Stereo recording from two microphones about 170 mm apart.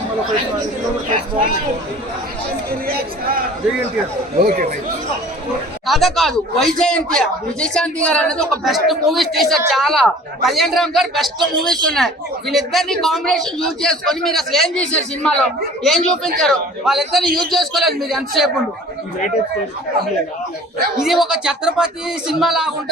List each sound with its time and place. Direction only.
2.8 s speech: 60° right (ahead or behind)
5.8 s speech: centre (ahead or behind)
21.0 s speech: 5° right (ahead or behind)